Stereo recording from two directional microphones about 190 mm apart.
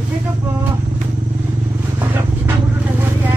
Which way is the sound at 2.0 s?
10° right (ahead or behind).